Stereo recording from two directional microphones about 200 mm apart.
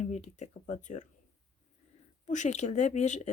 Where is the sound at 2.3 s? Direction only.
35° left (ahead or behind).